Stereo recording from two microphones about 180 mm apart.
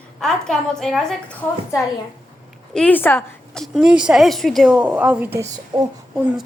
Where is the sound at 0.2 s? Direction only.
5° left (ahead or behind).